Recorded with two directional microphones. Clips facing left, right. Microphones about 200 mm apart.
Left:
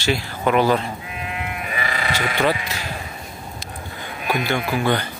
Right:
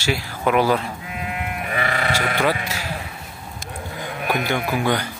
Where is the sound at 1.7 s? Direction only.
55° right (ahead or behind).